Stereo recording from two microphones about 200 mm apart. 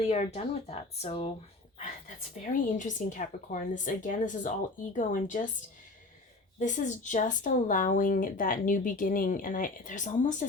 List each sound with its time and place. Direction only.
0.0 s speech: 35° left (ahead or behind)
2.4 s speech: 40° left (ahead or behind)
6.6 s speech: 40° left (ahead or behind)